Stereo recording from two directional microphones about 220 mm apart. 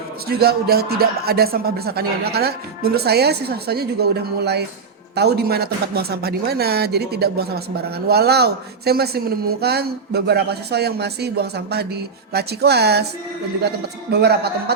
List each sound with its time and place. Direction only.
0.3 s speech: 45° right (ahead or behind)